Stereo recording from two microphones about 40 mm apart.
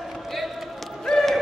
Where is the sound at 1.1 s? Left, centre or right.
Centre.